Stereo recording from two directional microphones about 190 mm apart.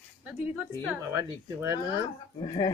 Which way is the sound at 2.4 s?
20° left (ahead or behind).